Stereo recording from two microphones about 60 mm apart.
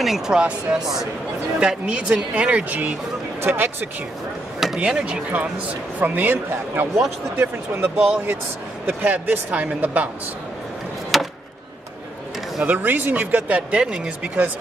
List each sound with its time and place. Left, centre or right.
0.0 s speech: centre
0.4 s speech: centre
3.4 s speech: right
4.7 s speech: centre
5.9 s speech: right
8.8 s speech: right
11.1 s chop: centre
12.6 s speech: right